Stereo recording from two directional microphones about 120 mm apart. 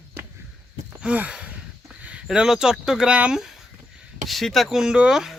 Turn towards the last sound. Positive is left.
turn(degrees=-5)  # may be behind; listen again after turning